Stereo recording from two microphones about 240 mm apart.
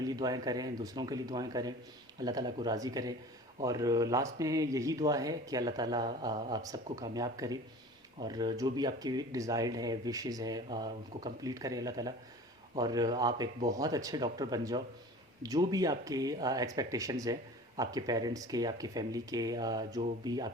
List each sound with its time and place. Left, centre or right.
0.0 s speech: centre